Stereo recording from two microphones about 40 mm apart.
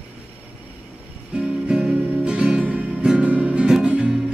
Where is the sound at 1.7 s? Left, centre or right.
Right.